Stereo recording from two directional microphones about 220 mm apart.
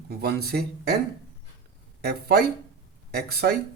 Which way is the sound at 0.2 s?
45° right (ahead or behind).